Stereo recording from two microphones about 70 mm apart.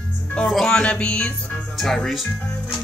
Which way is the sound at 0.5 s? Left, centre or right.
Centre.